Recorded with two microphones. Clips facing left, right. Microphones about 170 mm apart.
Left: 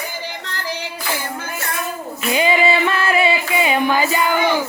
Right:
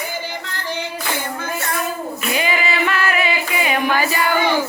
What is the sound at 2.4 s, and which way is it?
Music, 30° left (ahead or behind).